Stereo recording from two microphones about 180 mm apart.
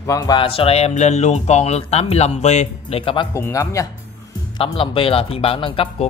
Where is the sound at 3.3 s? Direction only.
15° left (ahead or behind).